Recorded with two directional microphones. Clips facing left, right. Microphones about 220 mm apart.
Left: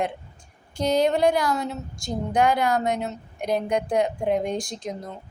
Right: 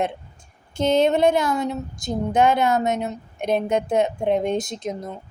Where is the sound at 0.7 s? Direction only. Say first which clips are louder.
Right 3 dB; 25° right (ahead or behind).